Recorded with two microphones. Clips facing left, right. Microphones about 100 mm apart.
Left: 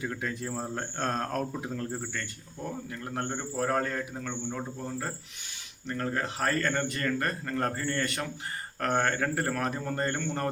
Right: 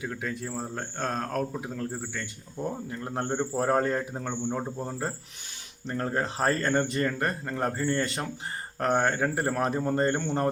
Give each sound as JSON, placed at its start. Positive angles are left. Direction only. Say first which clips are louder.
{"t": 0.0, "sound": "speech", "louder": "even", "side_deg": 0}
{"t": 2.9, "sound": "speech", "louder": "right 3 dB", "side_deg": -25}